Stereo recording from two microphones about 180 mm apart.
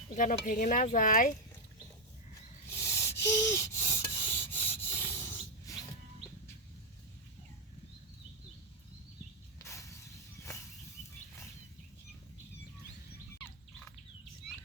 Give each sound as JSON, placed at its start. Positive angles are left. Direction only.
{"t": 0.2, "sound": "speech", "side_deg": 50}
{"t": 2.6, "sound": "rub", "side_deg": 15}
{"t": 9.6, "sound": "a sound", "side_deg": 15}